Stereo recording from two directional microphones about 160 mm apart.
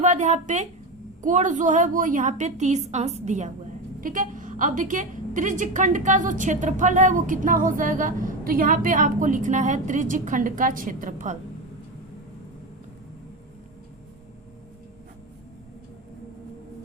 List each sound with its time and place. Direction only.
0.0 s a woman's voice: 50° right (ahead or behind)